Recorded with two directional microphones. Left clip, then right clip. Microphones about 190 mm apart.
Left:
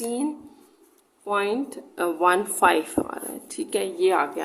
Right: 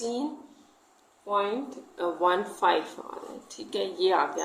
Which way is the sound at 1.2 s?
60° left (ahead or behind).